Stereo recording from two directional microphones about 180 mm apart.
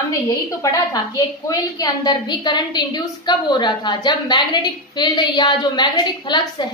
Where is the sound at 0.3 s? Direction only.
20° left (ahead or behind).